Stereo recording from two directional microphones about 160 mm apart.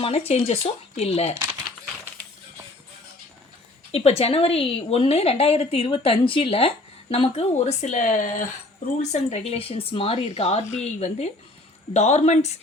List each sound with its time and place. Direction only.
0.0 s a woman's voice: 40° left (ahead or behind)
3.9 s a woman's voice: 40° left (ahead or behind)